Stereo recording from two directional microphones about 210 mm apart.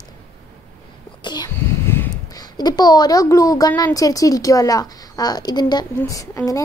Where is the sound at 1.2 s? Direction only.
20° left (ahead or behind).